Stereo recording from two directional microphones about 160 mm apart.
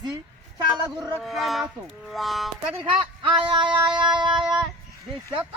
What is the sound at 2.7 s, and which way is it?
Speech, 30° right (ahead or behind).